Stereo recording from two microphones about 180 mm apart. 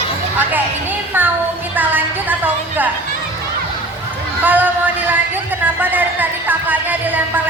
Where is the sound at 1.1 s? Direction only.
10° right (ahead or behind).